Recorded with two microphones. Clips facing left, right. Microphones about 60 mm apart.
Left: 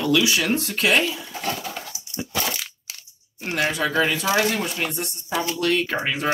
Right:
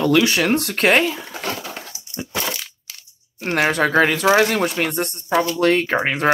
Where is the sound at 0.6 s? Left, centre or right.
Right.